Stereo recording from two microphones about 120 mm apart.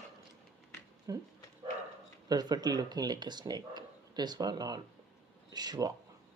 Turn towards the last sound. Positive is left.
turn(degrees=-35)  # may be behind; listen again after turning